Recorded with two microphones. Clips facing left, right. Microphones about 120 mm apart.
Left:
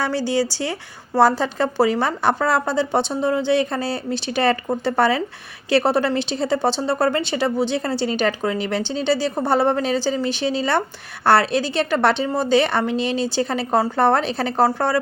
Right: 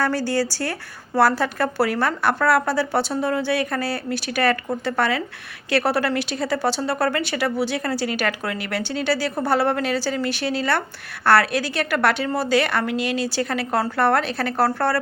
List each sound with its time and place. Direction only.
0.0 s a woman's voice: 15° left (ahead or behind)